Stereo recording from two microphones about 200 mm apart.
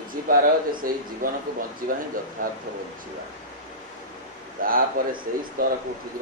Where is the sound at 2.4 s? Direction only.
45° right (ahead or behind).